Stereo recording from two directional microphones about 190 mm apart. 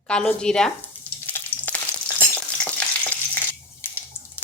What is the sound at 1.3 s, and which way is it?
Frying, 10° left (ahead or behind).